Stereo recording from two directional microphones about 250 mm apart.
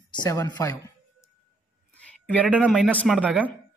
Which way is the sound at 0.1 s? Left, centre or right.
Centre.